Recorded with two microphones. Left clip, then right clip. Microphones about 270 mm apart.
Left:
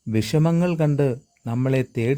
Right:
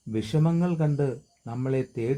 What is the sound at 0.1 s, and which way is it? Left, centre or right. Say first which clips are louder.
Speech: left 6 dB; left.